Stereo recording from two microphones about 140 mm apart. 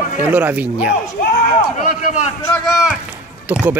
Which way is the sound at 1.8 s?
60° left (ahead or behind).